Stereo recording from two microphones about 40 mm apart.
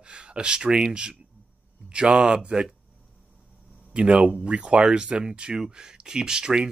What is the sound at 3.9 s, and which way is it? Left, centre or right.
Speech, right.